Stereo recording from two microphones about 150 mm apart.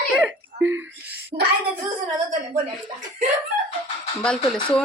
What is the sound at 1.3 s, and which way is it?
Child singing, 30° right (ahead or behind).